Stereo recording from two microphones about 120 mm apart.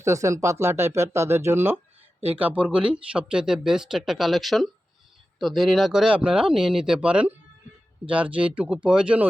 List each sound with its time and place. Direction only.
0.0 s speech: 25° right (ahead or behind); by 9.2 s 10° right (ahead or behind)